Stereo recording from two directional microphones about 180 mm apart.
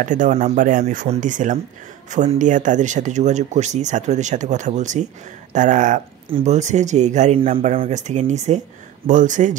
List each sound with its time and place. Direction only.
0.0 s speech: 45° right (ahead or behind)